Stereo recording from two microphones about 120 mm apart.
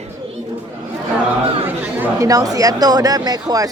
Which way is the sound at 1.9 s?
15° right (ahead or behind).